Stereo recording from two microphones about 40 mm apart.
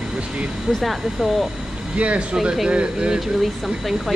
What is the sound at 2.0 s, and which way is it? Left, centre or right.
Speech, right.